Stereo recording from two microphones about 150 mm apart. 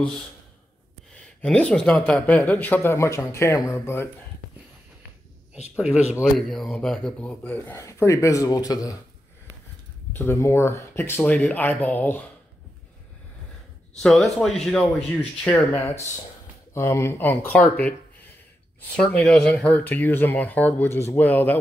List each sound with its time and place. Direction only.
1.4 s speech: 5° left (ahead or behind)
5.8 s speech: 5° right (ahead or behind); by 8.9 s 25° left (ahead or behind)
10.1 s speech: 15° left (ahead or behind)
13.9 s speech: centre (ahead or behind)